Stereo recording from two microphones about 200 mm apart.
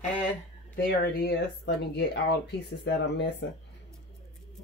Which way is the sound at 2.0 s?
55° left (ahead or behind).